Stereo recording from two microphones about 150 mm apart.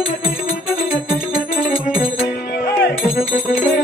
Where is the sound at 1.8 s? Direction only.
85° left.